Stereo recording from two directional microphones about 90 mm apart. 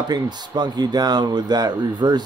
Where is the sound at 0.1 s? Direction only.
50° right (ahead or behind).